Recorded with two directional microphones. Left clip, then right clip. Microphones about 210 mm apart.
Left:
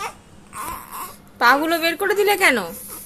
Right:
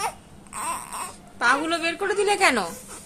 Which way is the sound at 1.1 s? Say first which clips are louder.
Left 6 dB; 20° left (ahead or behind).